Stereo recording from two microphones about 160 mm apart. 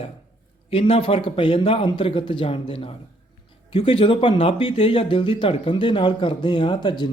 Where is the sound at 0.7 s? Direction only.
35° left (ahead or behind).